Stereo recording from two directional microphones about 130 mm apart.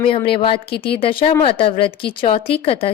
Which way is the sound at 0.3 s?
45° left (ahead or behind).